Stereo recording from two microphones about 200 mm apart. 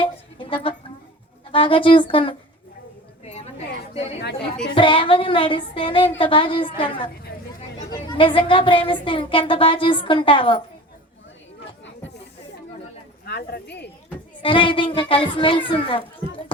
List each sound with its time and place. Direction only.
0.0 s music: 25° left (ahead or behind)
1.5 s a woman's voice: 25° left (ahead or behind)
4.7 s a woman's voice: 25° left (ahead or behind)
13.2 s speech: 55° left (ahead or behind)
14.4 s a woman's voice: 25° left (ahead or behind)